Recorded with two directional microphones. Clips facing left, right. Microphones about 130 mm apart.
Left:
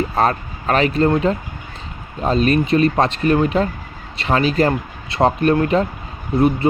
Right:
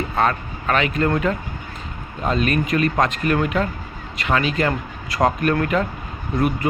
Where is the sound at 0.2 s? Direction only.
35° left (ahead or behind).